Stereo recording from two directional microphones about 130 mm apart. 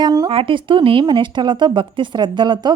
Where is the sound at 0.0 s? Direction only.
30° right (ahead or behind).